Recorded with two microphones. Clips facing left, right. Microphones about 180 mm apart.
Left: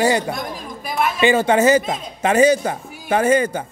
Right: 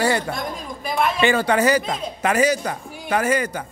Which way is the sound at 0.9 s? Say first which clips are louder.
Even; centre (ahead or behind).